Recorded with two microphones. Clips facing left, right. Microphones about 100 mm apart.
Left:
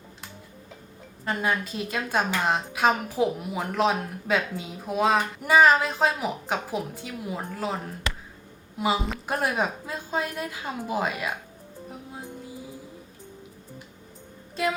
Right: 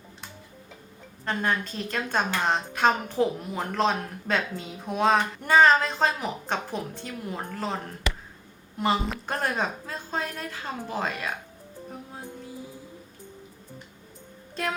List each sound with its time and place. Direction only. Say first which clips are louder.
1.2 s a woman's voice: left 1 dB; 5° left (ahead or behind)
14.5 s music: left 3 dB; 5° left (ahead or behind)